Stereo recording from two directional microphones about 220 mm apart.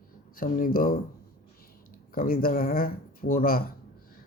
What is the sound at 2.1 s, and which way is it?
Speech, 40° left (ahead or behind).